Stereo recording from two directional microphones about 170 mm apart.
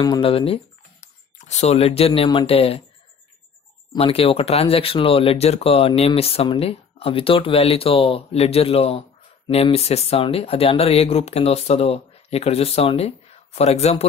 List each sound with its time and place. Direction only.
0.2 s speech: 35° left (ahead or behind)
3.9 s speech: 35° left (ahead or behind)